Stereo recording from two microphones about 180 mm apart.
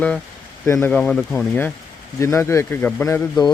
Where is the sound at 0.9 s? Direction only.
5° left (ahead or behind).